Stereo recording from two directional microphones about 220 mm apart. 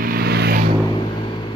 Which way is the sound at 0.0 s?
40° right (ahead or behind).